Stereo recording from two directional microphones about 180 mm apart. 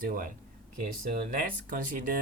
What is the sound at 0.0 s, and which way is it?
Speech, 50° right (ahead or behind).